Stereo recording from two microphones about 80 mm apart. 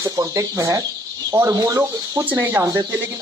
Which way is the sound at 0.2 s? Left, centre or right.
Right.